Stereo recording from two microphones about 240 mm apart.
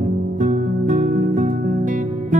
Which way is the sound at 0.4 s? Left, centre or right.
Right.